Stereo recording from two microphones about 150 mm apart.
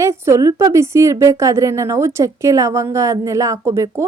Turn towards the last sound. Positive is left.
turn(degrees=-20)  # may be behind; listen again after turning